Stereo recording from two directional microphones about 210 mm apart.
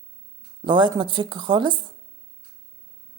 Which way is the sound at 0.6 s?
20° right (ahead or behind).